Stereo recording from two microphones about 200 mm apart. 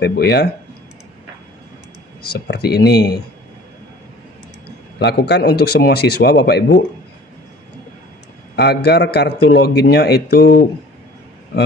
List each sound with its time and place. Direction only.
0.0 s a man's voice: 55° left (ahead or behind)
2.3 s a man's voice: 55° left (ahead or behind)
4.9 s a man's voice: 55° left (ahead or behind)
8.5 s a man's voice: 55° left (ahead or behind)